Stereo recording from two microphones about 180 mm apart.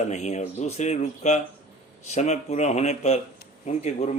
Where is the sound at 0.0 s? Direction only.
40° left (ahead or behind).